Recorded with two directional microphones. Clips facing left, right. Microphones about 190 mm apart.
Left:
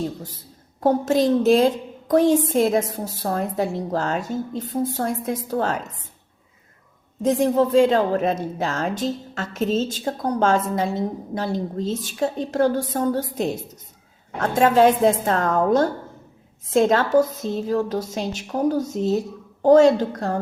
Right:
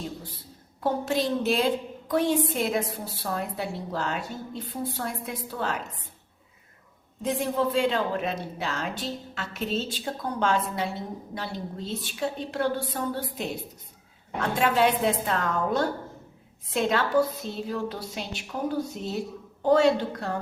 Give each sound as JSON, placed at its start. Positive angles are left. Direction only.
{"t": 0.8, "sound": "a woman's voice", "side_deg": 45}
{"t": 7.2, "sound": "a woman's voice", "side_deg": 40}